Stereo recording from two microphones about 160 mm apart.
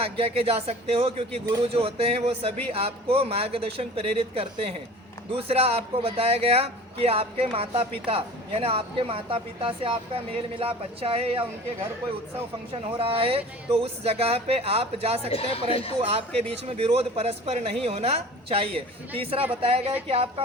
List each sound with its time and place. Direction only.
0.0 s a man's voice: 35° right (ahead or behind)
12.7 s a man's voice: 35° right (ahead or behind)
15.3 s speech: 35° left (ahead or behind)
16.0 s a man's voice: 40° right (ahead or behind)